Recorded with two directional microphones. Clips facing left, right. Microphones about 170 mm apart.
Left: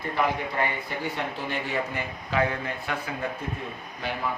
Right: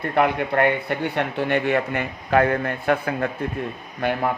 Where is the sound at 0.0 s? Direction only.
65° right (ahead or behind).